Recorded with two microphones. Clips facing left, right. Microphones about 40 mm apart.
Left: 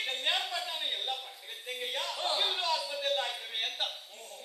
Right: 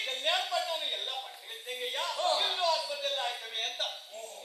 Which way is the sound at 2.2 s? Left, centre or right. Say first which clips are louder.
Right 3 dB; centre.